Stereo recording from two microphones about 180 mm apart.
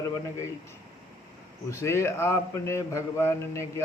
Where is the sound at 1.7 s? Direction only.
15° left (ahead or behind).